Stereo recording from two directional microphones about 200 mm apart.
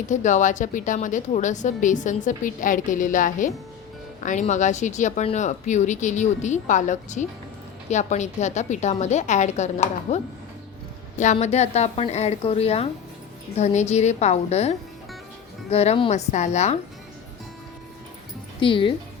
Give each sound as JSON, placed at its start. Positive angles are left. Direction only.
{"t": 0.1, "sound": "a woman's voice", "side_deg": 40}
{"t": 11.2, "sound": "a woman's voice", "side_deg": 35}
{"t": 18.6, "sound": "speech", "side_deg": 25}